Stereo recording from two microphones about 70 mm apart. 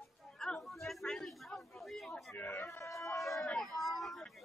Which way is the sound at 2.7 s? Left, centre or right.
Left.